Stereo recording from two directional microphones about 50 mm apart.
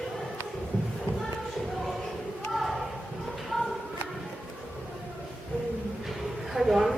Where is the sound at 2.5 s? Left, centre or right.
Centre.